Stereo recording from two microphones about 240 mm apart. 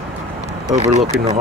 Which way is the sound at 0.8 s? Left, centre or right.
Right.